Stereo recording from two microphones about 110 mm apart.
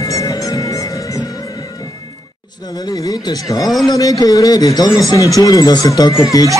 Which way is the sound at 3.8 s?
35° left (ahead or behind).